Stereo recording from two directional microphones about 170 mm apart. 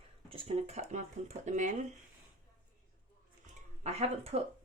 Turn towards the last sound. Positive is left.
turn(degrees=-40)  # may be behind; listen again after turning